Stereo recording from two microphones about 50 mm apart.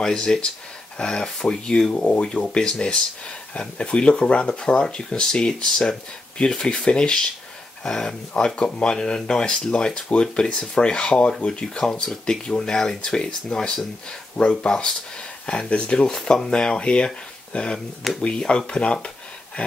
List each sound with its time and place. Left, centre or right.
0.0 s speech: centre